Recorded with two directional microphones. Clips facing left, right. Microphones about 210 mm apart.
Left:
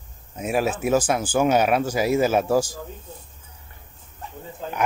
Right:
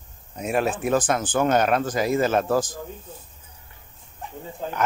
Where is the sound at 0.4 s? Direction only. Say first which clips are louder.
Left 1 dB; 5° left (ahead or behind).